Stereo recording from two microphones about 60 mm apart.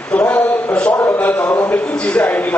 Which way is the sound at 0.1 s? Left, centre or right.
Left.